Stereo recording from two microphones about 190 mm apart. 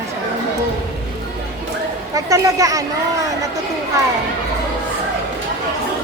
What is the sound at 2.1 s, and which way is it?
Speech, 15° right (ahead or behind).